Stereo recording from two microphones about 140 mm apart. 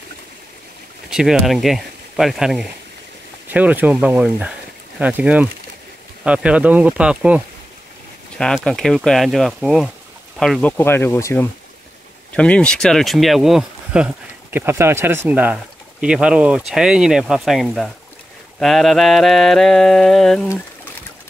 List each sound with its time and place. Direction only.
1.1 s speech: centre (ahead or behind)
8.5 s speech: centre (ahead or behind)
10.6 s speech: 15° left (ahead or behind)
12.4 s speech: 5° left (ahead or behind)